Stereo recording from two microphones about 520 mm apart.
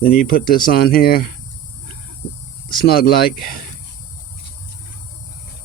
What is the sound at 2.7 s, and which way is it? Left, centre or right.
Speech, centre.